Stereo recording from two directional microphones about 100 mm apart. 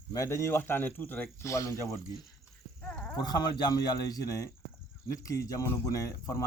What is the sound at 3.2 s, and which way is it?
Speech, 45° left (ahead or behind).